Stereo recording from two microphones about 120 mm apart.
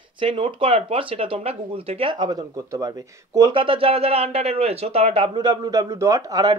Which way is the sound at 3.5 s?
50° right (ahead or behind).